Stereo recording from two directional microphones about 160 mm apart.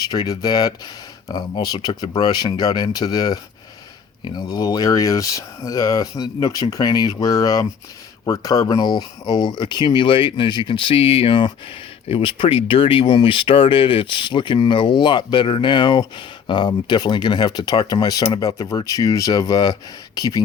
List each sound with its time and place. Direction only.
0.0 s speech: 25° left (ahead or behind)